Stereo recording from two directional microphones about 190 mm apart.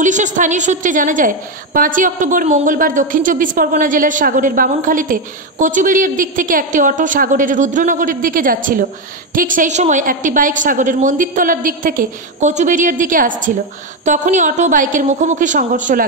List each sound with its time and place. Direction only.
0.0 s a woman's voice: 40° right (ahead or behind)